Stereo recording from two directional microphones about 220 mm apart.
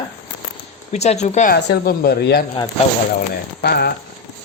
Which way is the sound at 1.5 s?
45° left (ahead or behind).